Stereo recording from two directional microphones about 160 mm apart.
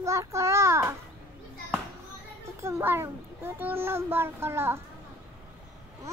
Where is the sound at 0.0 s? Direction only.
20° right (ahead or behind).